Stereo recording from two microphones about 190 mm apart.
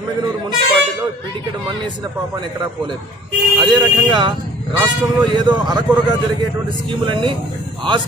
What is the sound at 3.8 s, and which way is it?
A man's voice, 25° right (ahead or behind).